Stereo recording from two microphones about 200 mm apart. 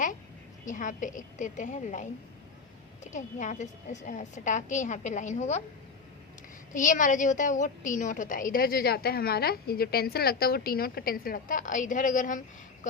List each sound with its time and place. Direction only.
0.6 s a woman's voice: 40° left (ahead or behind)
6.7 s a woman's voice: 40° left (ahead or behind)